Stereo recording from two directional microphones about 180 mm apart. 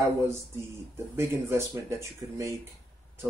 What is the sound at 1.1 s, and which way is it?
Speech, 15° right (ahead or behind).